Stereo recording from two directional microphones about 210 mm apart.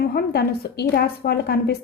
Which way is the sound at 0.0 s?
50° left (ahead or behind).